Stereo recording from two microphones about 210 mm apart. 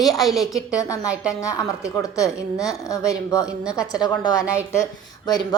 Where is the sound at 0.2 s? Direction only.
Centre (ahead or behind).